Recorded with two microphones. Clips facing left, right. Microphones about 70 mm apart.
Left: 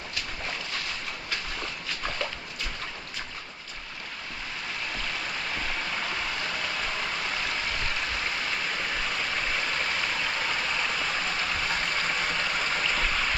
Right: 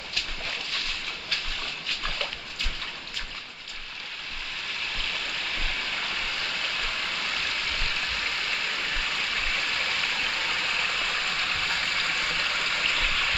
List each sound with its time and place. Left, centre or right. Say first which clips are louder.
0.7 s a sound: even; centre
1.9 s dog: left 1 dB; centre
4.9 s stream: even; centre